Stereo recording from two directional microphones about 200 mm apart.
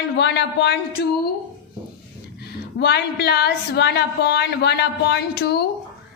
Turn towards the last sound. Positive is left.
turn(degrees=55)  # may be behind; listen again after turning